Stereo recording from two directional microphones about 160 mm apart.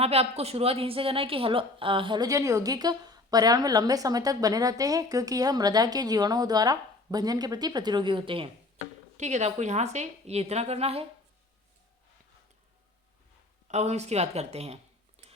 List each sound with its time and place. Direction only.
0.0 s a woman's voice: 40° right (ahead or behind)
9.1 s a woman's voice: 45° right (ahead or behind)
13.7 s a woman's voice: 45° right (ahead or behind)
15.2 s a sound: 40° right (ahead or behind)